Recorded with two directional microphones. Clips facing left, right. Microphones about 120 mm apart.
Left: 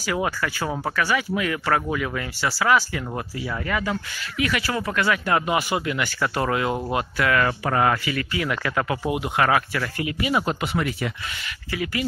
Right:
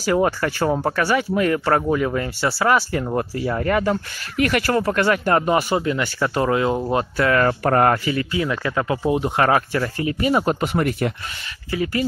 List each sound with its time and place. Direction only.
0.0 s speech: 35° right (ahead or behind)
11.7 s speech: 35° right (ahead or behind)